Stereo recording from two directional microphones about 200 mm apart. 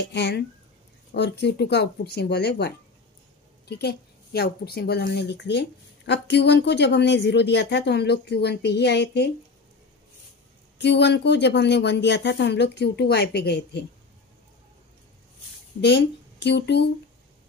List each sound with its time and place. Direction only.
0.0 s a woman's voice: 60° left (ahead or behind)
10.8 s a woman's voice: 60° left (ahead or behind)
15.8 s speech: 60° left (ahead or behind)